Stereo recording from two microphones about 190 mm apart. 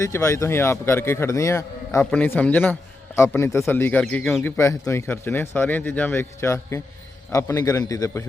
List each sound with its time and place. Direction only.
0.0 s speech: 15° left (ahead or behind)